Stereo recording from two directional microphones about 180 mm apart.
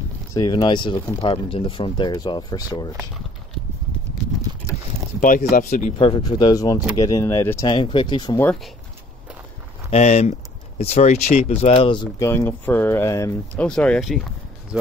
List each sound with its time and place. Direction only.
0.3 s speech: 25° left (ahead or behind)
5.2 s speech: 45° left (ahead or behind)
5.9 s speech: 25° left (ahead or behind)
9.8 s speech: 35° left (ahead or behind)
12.3 s speech: 10° left (ahead or behind)
13.7 s speech: 5° left (ahead or behind)